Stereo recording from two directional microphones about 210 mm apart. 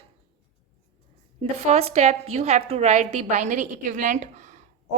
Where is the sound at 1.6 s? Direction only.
30° right (ahead or behind).